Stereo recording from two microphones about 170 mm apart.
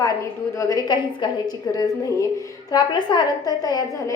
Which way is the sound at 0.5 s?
20° left (ahead or behind).